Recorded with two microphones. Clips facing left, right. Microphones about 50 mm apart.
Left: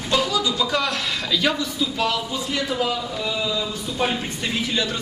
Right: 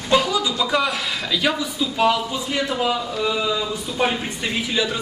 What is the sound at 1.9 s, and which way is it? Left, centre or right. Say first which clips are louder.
Speech: right 7 dB; centre.